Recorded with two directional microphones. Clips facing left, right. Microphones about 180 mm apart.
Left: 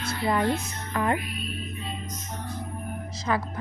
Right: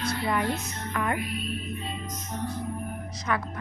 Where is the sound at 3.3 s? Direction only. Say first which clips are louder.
Left 2 dB; 30° left (ahead or behind).